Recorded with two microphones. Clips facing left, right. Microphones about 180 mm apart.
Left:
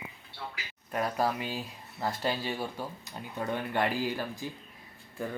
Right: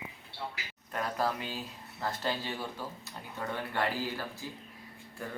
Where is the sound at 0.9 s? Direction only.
15° left (ahead or behind).